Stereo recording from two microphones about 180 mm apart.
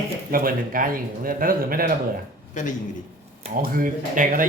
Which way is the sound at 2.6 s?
45° left (ahead or behind).